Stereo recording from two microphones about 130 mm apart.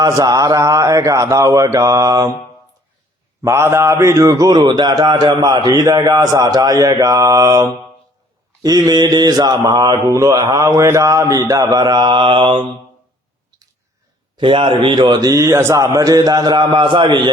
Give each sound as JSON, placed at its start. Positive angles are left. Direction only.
{"t": 0.0, "sound": "a man's voice", "side_deg": -30}
{"t": 3.4, "sound": "a man's voice", "side_deg": -20}
{"t": 14.3, "sound": "a man's voice", "side_deg": -40}